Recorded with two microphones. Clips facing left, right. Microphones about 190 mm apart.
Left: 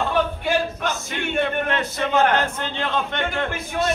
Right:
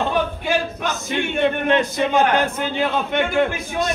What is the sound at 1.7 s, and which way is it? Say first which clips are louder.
A man's voice: right 5 dB; 15° right (ahead or behind).